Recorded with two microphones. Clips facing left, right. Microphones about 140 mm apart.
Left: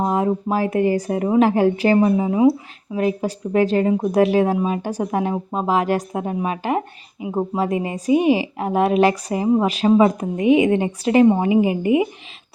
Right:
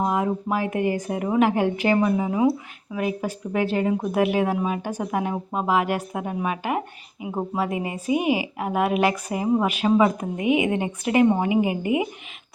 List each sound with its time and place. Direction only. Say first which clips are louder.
0.0 s speech: left 4 dB; 30° left (ahead or behind)